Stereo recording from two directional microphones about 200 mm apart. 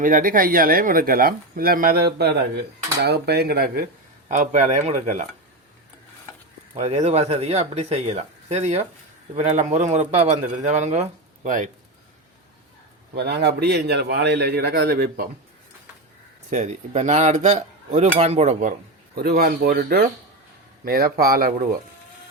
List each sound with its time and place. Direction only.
0.0 s speech: 45° right (ahead or behind)
4.3 s a man's voice: 35° right (ahead or behind)
6.7 s a man's voice: 35° right (ahead or behind)
13.1 s a man's voice: 55° right (ahead or behind)
16.5 s a man's voice: 35° right (ahead or behind)
19.1 s speech: 50° right (ahead or behind)